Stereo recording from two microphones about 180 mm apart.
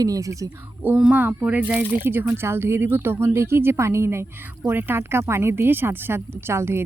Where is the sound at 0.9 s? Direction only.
5° right (ahead or behind).